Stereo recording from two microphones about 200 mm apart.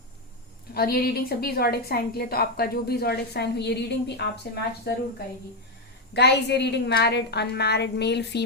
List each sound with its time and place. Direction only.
0.7 s a woman's voice: 50° left (ahead or behind)
6.1 s a woman's voice: 55° left (ahead or behind)